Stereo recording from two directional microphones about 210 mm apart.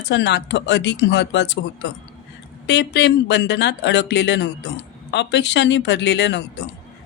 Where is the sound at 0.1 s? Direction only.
55° left (ahead or behind).